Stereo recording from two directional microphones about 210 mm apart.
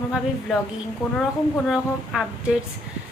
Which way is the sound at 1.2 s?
Centre (ahead or behind).